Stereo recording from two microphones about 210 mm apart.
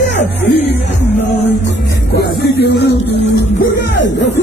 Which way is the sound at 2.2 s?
55° left (ahead or behind).